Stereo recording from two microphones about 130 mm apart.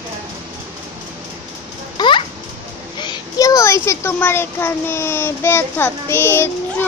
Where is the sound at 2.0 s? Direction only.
40° left (ahead or behind).